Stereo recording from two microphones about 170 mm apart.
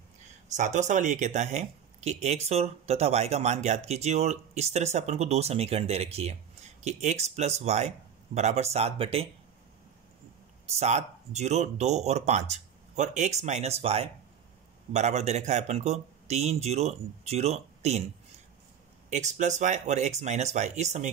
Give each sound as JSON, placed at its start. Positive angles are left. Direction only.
{"t": 0.6, "sound": "speech", "side_deg": -45}
{"t": 10.7, "sound": "speech", "side_deg": -40}
{"t": 19.0, "sound": "speech", "side_deg": -45}